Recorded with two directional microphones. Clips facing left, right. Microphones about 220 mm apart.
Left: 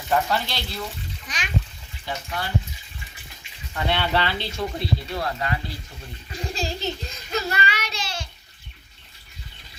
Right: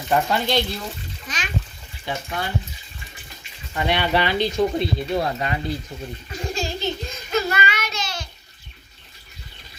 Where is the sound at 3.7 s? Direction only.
15° right (ahead or behind).